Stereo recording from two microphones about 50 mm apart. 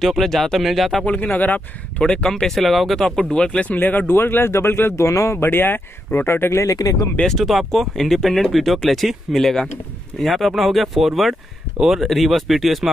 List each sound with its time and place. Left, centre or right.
0.0 s speech: centre
1.0 s speech: left
2.0 s speech: left
2.4 s speech: centre
3.2 s speech: centre
3.5 s speech: left
4.1 s speech: left
4.9 s speech: left
5.4 s speech: left
7.2 s speech: centre